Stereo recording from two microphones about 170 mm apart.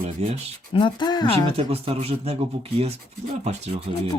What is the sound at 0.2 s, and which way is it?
Speech, 40° right (ahead or behind).